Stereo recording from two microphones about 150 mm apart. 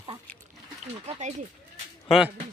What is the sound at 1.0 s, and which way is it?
Speech, 50° right (ahead or behind).